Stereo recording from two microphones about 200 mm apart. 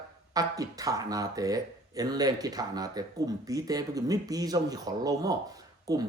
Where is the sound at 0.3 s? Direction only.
15° right (ahead or behind).